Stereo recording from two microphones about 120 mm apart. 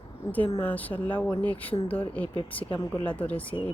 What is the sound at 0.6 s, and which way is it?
A woman's voice, 15° left (ahead or behind).